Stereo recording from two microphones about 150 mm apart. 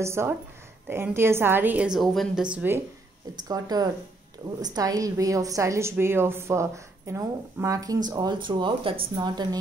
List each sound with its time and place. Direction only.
0.0 s a woman's voice: 15° right (ahead or behind)
3.4 s a woman's voice: 25° right (ahead or behind)